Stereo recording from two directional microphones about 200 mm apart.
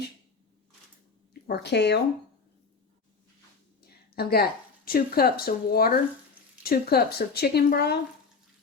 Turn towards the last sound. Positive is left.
turn(degrees=50)  # may be behind; listen again after turning